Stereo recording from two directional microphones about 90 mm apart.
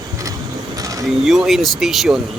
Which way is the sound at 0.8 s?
40° right (ahead or behind).